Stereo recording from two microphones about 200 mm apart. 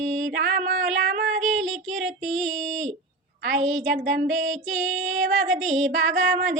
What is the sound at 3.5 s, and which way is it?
Female singing, 35° right (ahead or behind).